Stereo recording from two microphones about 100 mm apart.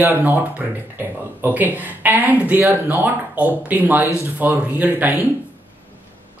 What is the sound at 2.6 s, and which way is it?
Speech, 25° right (ahead or behind).